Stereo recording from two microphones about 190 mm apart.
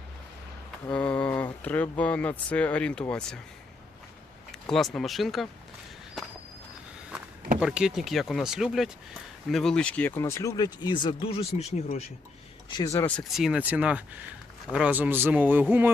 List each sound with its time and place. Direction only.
0.9 s a sound: 5° left (ahead or behind)
1.6 s speech: 10° left (ahead or behind)
4.7 s speech: centre (ahead or behind)
7.6 s speech: 5° right (ahead or behind); by 12.0 s 35° left (ahead or behind)
12.7 s speech: 15° left (ahead or behind); by 15.9 s 10° right (ahead or behind)